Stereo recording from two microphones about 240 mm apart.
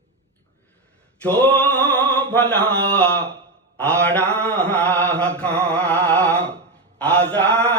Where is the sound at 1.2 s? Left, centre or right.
Centre.